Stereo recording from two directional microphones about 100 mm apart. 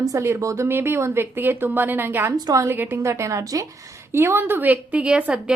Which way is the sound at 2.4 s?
35° right (ahead or behind).